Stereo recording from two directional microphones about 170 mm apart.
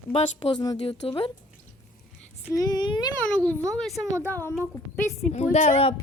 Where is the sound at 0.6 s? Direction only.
25° left (ahead or behind).